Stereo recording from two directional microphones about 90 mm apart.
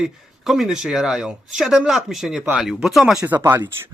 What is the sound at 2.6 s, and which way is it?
Speech, 5° right (ahead or behind).